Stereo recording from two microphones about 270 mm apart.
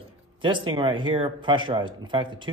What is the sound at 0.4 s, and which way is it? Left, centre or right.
Speech, centre.